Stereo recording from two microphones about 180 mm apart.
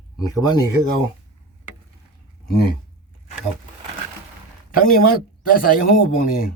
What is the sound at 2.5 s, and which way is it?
Speech, 60° left (ahead or behind).